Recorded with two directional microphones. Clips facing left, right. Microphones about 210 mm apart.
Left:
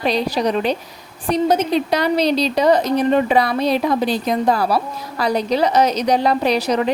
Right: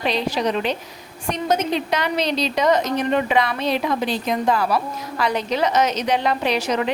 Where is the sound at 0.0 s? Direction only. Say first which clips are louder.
Left 3 dB; 40° left (ahead or behind).